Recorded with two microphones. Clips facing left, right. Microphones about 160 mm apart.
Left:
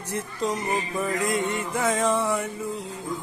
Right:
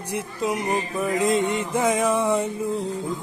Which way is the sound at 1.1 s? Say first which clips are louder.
Right 6 dB; 20° right (ahead or behind).